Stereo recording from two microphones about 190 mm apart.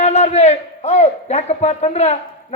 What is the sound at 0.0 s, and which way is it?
A man's voice, 35° left (ahead or behind).